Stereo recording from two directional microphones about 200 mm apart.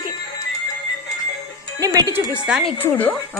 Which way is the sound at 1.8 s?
20° right (ahead or behind).